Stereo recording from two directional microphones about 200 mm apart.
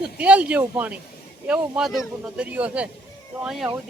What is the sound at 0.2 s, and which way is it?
Speech, 5° right (ahead or behind).